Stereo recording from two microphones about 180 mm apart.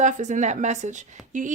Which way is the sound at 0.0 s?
40° right (ahead or behind).